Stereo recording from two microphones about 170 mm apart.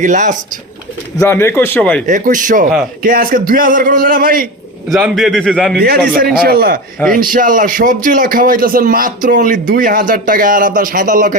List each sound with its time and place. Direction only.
0.0 s a man's voice: 45° right (ahead or behind)
1.2 s a man's voice: 15° left (ahead or behind)
2.0 s a man's voice: 50° right (ahead or behind)
4.9 s a man's voice: centre (ahead or behind)
5.8 s a man's voice: 65° right (ahead or behind)